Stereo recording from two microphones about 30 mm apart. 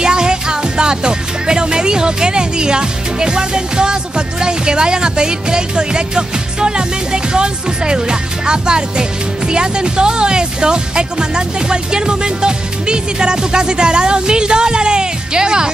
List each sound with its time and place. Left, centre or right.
0.0 s music: right
9.5 s speech: right